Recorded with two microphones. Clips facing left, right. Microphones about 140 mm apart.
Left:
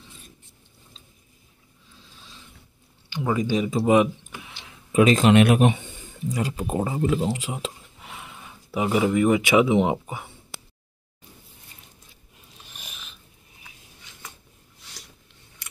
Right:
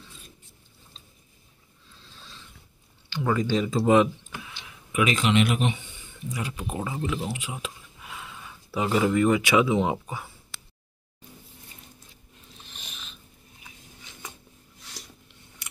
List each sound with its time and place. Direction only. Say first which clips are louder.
3.1 s speech: left 1 dB; 15° left (ahead or behind)
4.9 s speech: left 7 dB; 35° left (ahead or behind)
5.3 s speech: left 6 dB; 55° left (ahead or behind)
6.3 s speech: left 6 dB; 35° left (ahead or behind)
7.5 s speech: left 4 dB; 25° left (ahead or behind)
12.6 s dog: left 2 dB; 5° left (ahead or behind)